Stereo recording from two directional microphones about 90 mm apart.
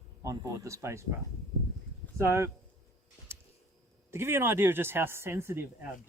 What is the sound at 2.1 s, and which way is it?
Speech, 30° right (ahead or behind).